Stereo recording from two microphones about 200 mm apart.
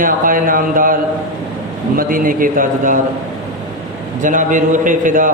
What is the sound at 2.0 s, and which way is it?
A man's voice, 45° right (ahead or behind).